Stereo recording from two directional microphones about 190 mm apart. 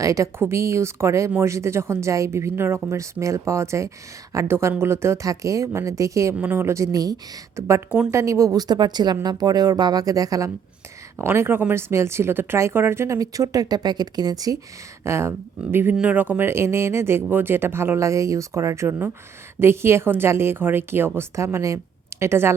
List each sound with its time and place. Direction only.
0.0 s speech: 15° right (ahead or behind)